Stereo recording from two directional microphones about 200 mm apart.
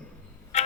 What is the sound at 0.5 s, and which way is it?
Clock, 35° left (ahead or behind).